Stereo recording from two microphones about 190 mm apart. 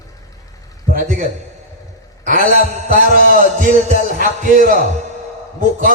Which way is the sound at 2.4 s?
50° left (ahead or behind).